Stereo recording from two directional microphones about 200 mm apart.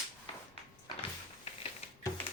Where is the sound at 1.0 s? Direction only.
30° left (ahead or behind).